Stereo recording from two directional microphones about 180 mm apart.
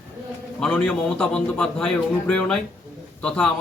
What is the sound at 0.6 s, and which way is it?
A man's voice, 5° left (ahead or behind).